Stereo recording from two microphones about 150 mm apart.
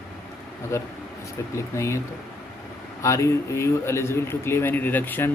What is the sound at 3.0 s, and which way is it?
A man's voice, 20° left (ahead or behind).